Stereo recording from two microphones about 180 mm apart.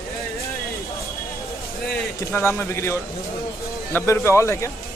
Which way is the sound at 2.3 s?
15° left (ahead or behind).